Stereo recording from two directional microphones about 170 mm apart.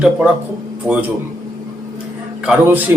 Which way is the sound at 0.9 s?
20° right (ahead or behind).